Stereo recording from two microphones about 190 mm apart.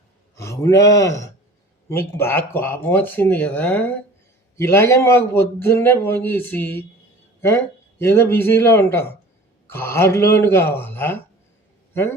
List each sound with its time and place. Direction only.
0.3 s a man's voice: 15° left (ahead or behind)